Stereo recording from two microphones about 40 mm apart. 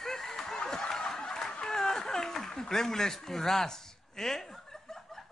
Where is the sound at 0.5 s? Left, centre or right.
Centre.